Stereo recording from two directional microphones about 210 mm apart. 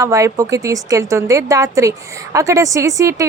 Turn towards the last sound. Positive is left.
turn(degrees=-15)  # may be behind; listen again after turning